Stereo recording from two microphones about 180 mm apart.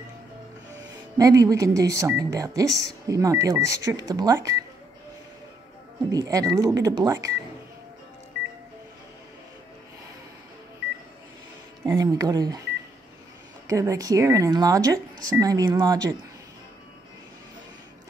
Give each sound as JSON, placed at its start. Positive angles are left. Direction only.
{"t": 1.1, "sound": "speech", "side_deg": -20}
{"t": 6.1, "sound": "speech", "side_deg": -20}
{"t": 11.8, "sound": "speech", "side_deg": -15}
{"t": 13.7, "sound": "speech", "side_deg": -20}